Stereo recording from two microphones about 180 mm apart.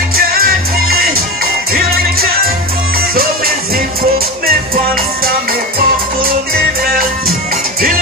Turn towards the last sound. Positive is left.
turn(degrees=-55)  # may be behind; listen again after turning